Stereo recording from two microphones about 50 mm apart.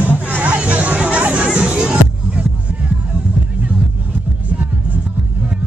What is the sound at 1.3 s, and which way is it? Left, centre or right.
Music, right.